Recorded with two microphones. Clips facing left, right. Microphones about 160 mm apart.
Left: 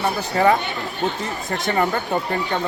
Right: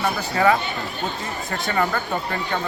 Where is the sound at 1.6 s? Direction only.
25° left (ahead or behind).